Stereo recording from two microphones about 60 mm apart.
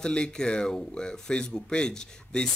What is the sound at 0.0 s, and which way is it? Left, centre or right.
Speech, centre.